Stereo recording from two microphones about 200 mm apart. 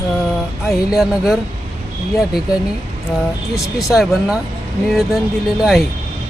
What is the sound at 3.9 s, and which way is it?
Speech, centre (ahead or behind).